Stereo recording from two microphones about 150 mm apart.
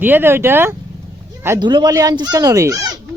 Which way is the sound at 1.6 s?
30° right (ahead or behind).